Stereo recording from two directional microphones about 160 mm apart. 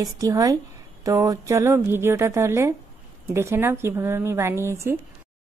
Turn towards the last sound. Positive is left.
turn(degrees=-15)  # may be behind; listen again after turning